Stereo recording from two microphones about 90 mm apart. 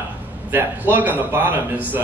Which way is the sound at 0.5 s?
20° right (ahead or behind).